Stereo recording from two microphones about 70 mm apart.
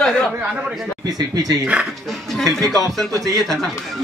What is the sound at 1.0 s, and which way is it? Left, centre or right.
Speech, right.